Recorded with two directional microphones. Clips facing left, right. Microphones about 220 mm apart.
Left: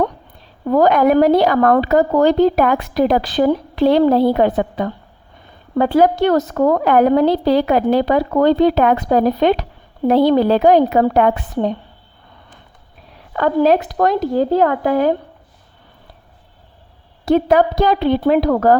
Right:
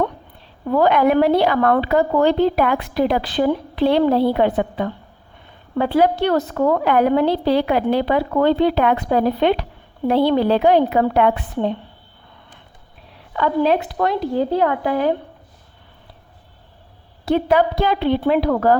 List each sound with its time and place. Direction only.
0.7 s a woman's voice: 40° left (ahead or behind)
13.3 s a woman's voice: 45° left (ahead or behind)
17.2 s a woman's voice: 45° left (ahead or behind)